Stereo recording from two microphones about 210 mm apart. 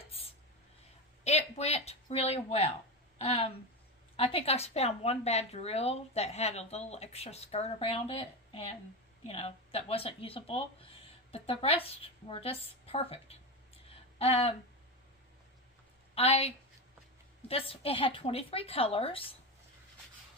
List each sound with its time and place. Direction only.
1.2 s a woman's voice: 30° left (ahead or behind)
16.1 s a woman's voice: 30° left (ahead or behind)
17.5 s a woman's voice: 25° left (ahead or behind)